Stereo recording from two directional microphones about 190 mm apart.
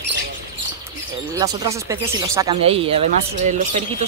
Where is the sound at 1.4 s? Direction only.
20° right (ahead or behind).